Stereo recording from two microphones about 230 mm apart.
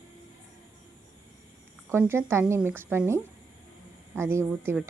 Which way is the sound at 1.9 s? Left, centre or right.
Centre.